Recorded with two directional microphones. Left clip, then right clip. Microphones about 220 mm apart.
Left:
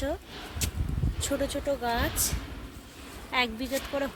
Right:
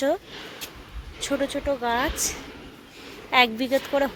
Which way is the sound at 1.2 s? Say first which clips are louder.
Right 4 dB; 15° right (ahead or behind).